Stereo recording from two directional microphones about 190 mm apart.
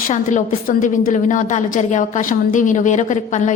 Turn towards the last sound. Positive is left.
turn(degrees=40)  # may be behind; listen again after turning